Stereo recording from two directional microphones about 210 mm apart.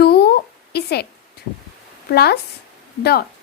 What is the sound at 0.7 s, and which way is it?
Speech, 50° left (ahead or behind).